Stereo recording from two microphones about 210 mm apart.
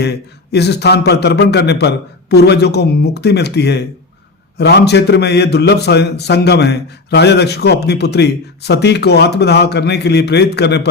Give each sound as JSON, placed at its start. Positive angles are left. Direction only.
{"t": 0.0, "sound": "a man's voice", "side_deg": 50}